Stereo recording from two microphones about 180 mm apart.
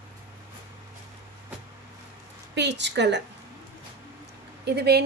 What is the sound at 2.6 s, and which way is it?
Speech, 75° right (ahead or behind).